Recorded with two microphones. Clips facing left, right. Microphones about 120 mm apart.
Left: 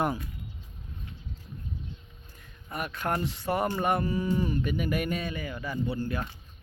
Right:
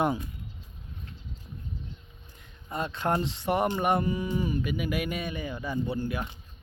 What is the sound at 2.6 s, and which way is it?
Speech, 25° right (ahead or behind).